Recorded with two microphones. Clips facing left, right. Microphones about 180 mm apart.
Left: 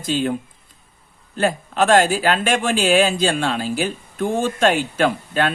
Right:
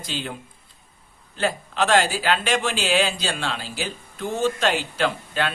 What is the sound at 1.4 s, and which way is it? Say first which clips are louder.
Speech: left 5 dB; 50° left (ahead or behind).